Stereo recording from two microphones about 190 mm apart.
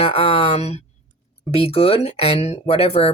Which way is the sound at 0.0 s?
30° left (ahead or behind).